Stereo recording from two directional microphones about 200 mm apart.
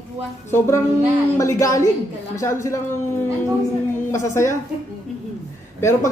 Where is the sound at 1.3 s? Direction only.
15° left (ahead or behind).